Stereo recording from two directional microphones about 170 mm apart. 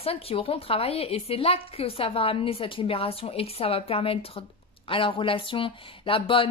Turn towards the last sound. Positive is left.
turn(degrees=30)  # may be behind; listen again after turning